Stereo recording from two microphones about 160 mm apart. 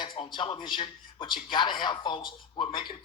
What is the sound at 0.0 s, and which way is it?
A man's voice, 30° left (ahead or behind).